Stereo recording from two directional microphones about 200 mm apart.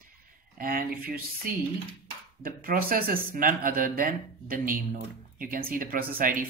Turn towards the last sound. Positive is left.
turn(degrees=-45)  # may be behind; listen again after turning